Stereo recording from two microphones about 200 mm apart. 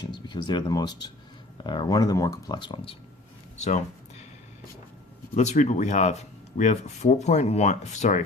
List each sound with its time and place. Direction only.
0.0 s speech: 20° left (ahead or behind)
5.3 s speech: 35° left (ahead or behind)